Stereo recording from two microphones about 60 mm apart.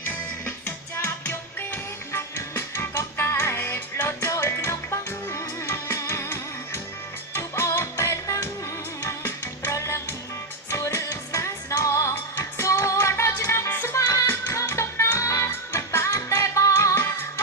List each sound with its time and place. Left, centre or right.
0.0 s music: left
14.3 s music: left
15.4 s music: left
16.9 s music: left